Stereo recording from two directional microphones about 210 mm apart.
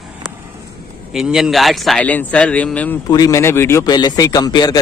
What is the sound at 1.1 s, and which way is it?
Speech, centre (ahead or behind).